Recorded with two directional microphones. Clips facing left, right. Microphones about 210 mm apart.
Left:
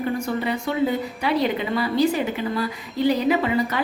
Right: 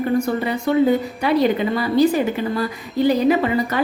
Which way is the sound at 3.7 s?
45° right (ahead or behind).